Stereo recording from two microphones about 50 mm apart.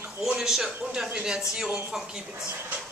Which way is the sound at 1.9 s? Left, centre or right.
Centre.